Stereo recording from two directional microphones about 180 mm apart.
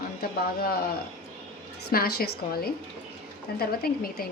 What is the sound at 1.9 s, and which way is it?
A woman's voice, 60° left (ahead or behind).